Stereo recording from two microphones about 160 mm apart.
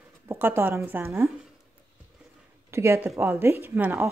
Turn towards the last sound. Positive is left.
turn(degrees=-10)  # may be behind; listen again after turning